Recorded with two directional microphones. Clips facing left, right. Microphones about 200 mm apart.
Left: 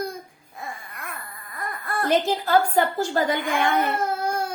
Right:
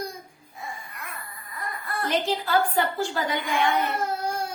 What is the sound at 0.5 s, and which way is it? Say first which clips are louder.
Baby cry: left 2 dB; 50° left (ahead or behind).